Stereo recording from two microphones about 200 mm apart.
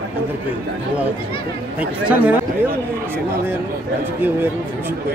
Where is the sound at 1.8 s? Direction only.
5° right (ahead or behind).